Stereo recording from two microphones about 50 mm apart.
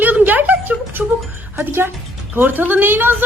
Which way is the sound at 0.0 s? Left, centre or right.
Right.